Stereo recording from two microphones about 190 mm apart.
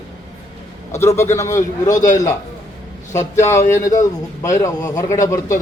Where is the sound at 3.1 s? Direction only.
15° left (ahead or behind).